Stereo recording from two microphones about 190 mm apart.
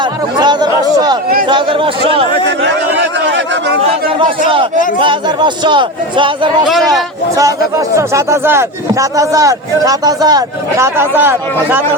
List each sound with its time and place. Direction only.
0.0 s chatter: 20° right (ahead or behind)
1.5 s a man's voice: 25° right (ahead or behind)
2.6 s a sound: 65° right (ahead or behind)
4.9 s a man's voice: 25° right (ahead or behind)
6.7 s speech: centre (ahead or behind)
7.9 s speech: 15° right (ahead or behind)